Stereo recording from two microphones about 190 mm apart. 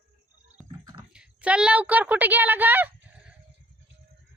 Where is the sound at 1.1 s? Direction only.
5° right (ahead or behind).